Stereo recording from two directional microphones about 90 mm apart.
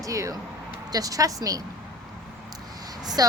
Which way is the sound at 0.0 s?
40° right (ahead or behind).